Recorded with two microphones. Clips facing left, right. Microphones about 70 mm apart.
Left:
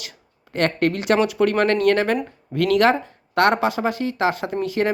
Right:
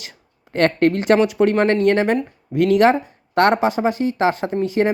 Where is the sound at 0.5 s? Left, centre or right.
Right.